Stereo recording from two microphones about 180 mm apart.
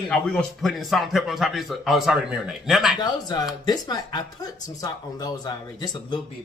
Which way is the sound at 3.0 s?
20° left (ahead or behind).